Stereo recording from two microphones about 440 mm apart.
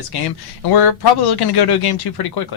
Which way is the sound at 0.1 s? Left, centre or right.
Left.